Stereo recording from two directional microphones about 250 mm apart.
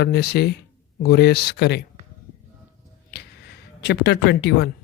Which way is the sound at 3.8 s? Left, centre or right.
Left.